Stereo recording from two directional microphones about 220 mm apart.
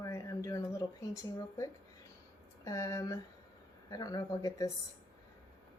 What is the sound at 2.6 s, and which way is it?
Speech, 15° left (ahead or behind).